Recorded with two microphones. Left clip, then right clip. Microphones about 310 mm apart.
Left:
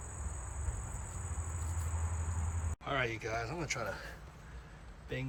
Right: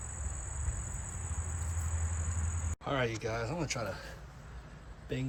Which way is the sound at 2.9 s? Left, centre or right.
Centre.